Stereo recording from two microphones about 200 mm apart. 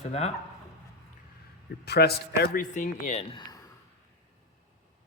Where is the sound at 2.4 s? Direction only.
40° left (ahead or behind).